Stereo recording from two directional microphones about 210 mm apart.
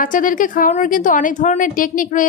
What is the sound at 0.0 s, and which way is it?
A woman's voice, 40° left (ahead or behind).